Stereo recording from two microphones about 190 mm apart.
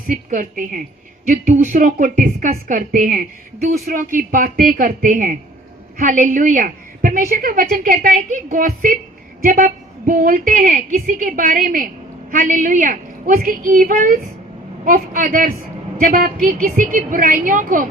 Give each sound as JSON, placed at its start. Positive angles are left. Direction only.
{"t": 0.1, "sound": "a woman's voice", "side_deg": -45}